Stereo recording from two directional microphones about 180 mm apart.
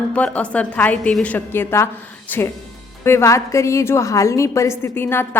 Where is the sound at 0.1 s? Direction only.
5° left (ahead or behind).